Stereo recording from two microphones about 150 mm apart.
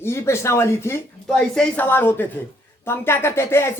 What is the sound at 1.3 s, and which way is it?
Speech, 5° left (ahead or behind).